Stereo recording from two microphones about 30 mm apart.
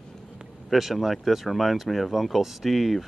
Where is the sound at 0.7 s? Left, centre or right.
Centre.